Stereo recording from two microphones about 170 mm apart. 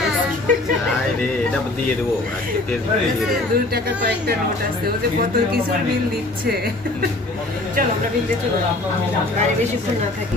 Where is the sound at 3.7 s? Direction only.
65° right (ahead or behind).